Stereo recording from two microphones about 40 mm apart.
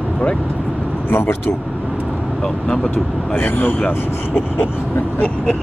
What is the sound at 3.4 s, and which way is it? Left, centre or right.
Speech, left.